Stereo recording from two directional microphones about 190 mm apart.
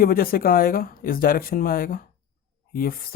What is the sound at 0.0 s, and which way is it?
Speech, 50° left (ahead or behind).